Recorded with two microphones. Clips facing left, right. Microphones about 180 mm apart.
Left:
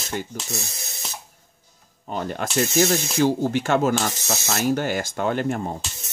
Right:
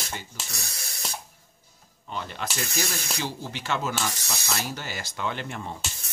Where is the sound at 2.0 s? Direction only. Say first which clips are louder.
Left 6 dB; 45° left (ahead or behind).